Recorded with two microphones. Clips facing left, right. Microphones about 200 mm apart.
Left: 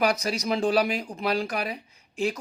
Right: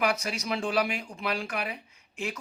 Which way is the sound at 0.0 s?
40° left (ahead or behind).